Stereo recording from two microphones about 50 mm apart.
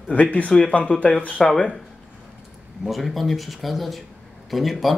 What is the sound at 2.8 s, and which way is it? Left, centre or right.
Speech, centre.